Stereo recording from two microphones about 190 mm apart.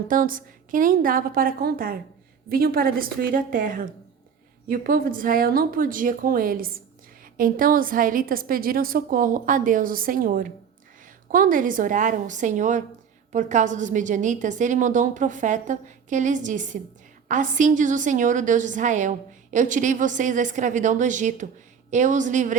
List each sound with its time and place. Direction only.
0.1 s a woman's voice: 45° right (ahead or behind)